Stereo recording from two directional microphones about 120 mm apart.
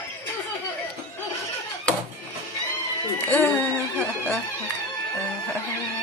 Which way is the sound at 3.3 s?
15° left (ahead or behind).